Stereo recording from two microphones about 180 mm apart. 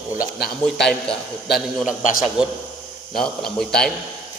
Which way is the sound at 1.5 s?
Centre (ahead or behind).